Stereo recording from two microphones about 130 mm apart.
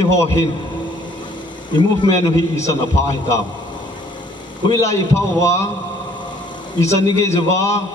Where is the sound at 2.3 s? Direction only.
25° left (ahead or behind).